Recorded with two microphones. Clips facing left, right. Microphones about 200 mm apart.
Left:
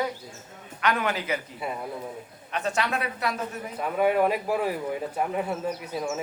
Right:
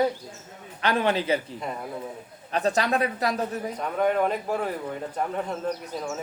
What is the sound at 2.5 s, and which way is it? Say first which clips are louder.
Speech: right 4 dB; 35° right (ahead or behind).